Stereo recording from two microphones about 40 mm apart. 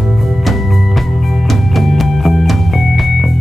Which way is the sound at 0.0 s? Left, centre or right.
Centre.